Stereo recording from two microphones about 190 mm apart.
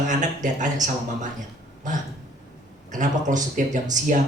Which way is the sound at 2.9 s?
40° right (ahead or behind).